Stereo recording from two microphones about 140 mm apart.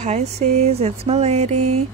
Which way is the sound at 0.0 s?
50° right (ahead or behind).